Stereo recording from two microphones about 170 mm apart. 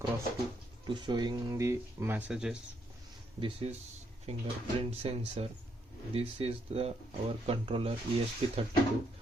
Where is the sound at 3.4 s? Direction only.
35° right (ahead or behind).